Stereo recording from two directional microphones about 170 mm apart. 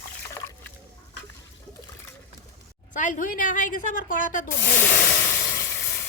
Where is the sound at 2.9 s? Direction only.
45° left (ahead or behind).